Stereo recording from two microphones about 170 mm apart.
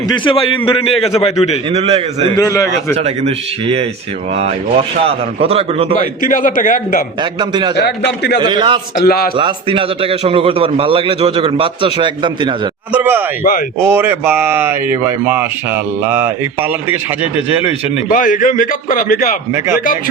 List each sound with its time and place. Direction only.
0.1 s a man's voice: 30° left (ahead or behind)
1.7 s a man's voice: 35° right (ahead or behind)
2.3 s a man's voice: 20° left (ahead or behind)
2.9 s a man's voice: 40° right (ahead or behind)
6.2 s a man's voice: 50° left (ahead or behind)
7.2 s a man's voice: 25° right (ahead or behind)
7.8 s a man's voice: 80° left
8.4 s a man's voice: 30° right (ahead or behind)
9.0 s a man's voice: 65° left (ahead or behind)
9.3 s a man's voice: 30° right (ahead or behind)
12.9 s speech: 10° right (ahead or behind)
18.1 s a man's voice: 50° left (ahead or behind)
19.5 s speech: 15° right (ahead or behind)